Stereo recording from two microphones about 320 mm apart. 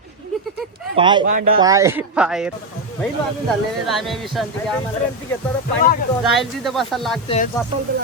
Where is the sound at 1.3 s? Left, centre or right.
Right.